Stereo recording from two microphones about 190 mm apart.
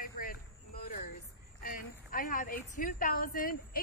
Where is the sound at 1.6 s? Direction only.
45° left (ahead or behind).